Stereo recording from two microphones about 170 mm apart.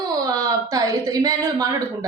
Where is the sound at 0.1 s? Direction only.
20° right (ahead or behind).